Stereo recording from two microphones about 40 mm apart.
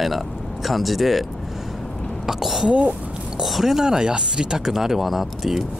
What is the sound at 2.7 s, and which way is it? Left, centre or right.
Speech, right.